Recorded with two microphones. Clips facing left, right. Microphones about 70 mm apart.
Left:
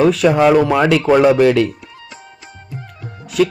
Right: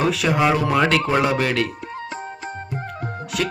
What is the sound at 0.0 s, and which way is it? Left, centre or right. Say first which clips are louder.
Speech: left 7 dB; centre.